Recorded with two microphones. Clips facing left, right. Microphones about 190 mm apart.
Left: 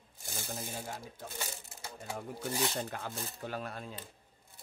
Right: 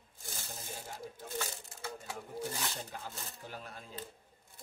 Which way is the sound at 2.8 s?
70° left (ahead or behind).